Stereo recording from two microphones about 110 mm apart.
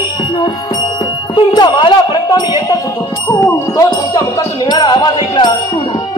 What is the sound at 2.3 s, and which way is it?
Music, 40° left (ahead or behind).